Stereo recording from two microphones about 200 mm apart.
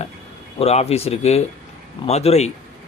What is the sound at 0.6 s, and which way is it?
Speech, 30° left (ahead or behind).